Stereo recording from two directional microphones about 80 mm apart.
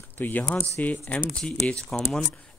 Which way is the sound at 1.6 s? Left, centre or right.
Centre.